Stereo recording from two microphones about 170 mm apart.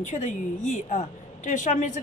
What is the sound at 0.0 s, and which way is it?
A woman's voice, 45° left (ahead or behind).